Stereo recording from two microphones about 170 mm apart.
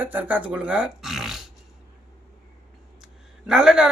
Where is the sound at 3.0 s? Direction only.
5° right (ahead or behind).